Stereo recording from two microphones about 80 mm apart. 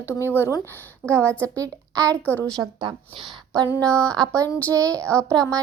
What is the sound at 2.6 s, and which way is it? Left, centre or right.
Speech, right.